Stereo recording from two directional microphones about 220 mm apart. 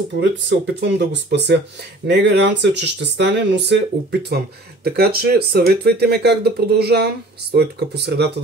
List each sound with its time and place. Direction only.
0.2 s speech: 55° right (ahead or behind)